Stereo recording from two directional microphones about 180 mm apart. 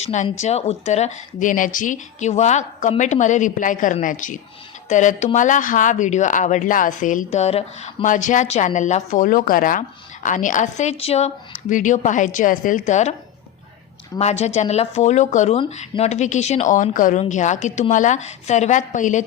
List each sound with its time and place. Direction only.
0.0 s speech: 40° left (ahead or behind)
14.2 s speech: 35° left (ahead or behind)